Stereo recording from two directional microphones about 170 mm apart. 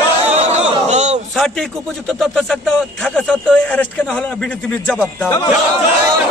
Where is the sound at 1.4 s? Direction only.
Centre (ahead or behind).